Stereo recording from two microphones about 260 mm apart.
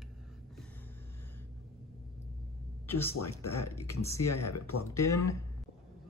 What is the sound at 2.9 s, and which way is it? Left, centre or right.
Speech, centre.